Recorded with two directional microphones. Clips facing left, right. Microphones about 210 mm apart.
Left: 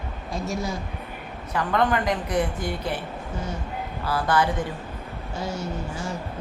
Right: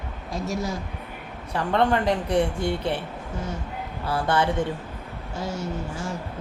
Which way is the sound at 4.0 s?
25° right (ahead or behind).